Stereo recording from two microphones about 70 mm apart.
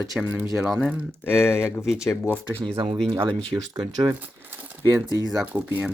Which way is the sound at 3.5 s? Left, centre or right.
Right.